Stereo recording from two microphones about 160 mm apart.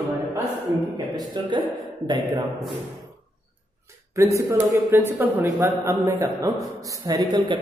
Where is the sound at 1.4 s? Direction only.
30° right (ahead or behind).